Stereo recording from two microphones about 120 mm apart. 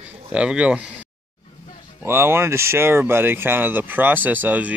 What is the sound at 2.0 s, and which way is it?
Speech, 20° right (ahead or behind).